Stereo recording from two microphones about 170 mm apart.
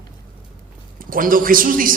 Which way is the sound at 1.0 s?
55° right (ahead or behind).